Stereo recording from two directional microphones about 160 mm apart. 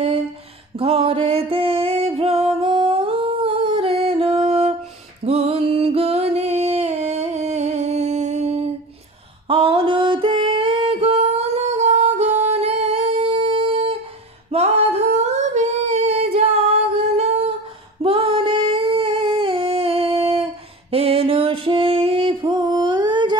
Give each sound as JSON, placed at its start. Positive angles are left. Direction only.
{"t": 0.7, "sound": "music", "side_deg": -35}
{"t": 9.5, "sound": "singing", "side_deg": -35}
{"t": 20.9, "sound": "music", "side_deg": -35}